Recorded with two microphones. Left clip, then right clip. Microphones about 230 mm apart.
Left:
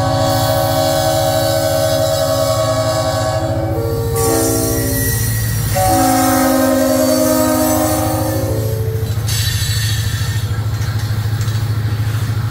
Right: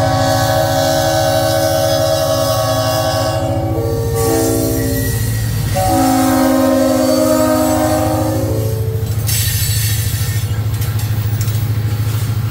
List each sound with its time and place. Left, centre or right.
0.0 s train: centre
5.8 s train: left